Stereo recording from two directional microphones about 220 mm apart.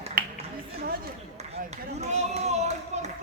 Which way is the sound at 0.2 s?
40° right (ahead or behind).